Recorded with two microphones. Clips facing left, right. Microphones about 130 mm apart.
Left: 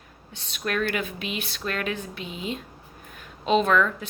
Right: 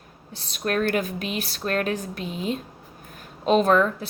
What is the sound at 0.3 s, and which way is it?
Speech, 40° right (ahead or behind).